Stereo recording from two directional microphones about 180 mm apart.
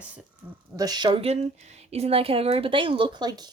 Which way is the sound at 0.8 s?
20° right (ahead or behind).